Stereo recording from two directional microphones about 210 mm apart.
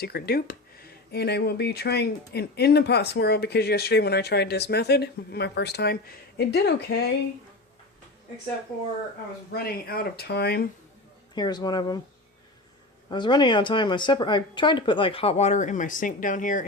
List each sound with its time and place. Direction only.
0.0 s speech: 50° left (ahead or behind)
9.6 s speech: 45° left (ahead or behind)
11.3 s speech: 20° left (ahead or behind)
13.1 s speech: 20° left (ahead or behind); by 16.6 s 40° left (ahead or behind)